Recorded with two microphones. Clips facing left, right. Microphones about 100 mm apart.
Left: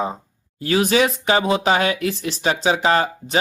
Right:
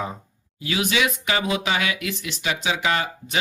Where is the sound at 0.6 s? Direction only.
40° left (ahead or behind).